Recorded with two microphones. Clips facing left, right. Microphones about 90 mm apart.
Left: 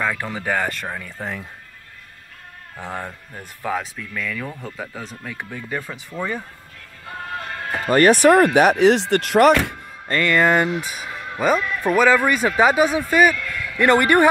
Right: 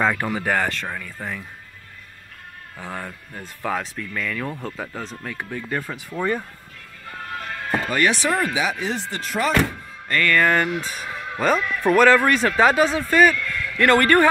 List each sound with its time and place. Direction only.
0.0 s speech: 15° right (ahead or behind)
0.3 s speech: centre (ahead or behind)
0.7 s speech: 15° left (ahead or behind)
2.8 s speech: 20° left (ahead or behind)
3.3 s speech: 5° left (ahead or behind)
7.3 s music: 30° left (ahead or behind); by 8.5 s 60° left (ahead or behind)
8.5 s speech: 70° left (ahead or behind)
10.0 s speech: 25° left (ahead or behind)